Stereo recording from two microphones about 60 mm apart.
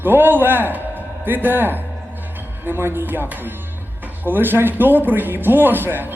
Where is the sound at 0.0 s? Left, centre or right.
Right.